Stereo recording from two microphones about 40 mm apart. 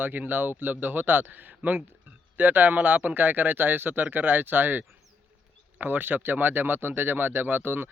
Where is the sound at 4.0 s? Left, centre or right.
Right.